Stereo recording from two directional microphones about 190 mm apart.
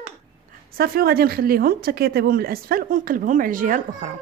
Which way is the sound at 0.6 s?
50° right (ahead or behind).